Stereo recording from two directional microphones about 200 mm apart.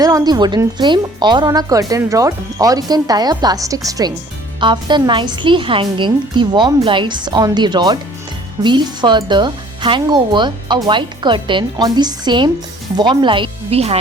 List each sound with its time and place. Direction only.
0.0 s speech: 20° right (ahead or behind)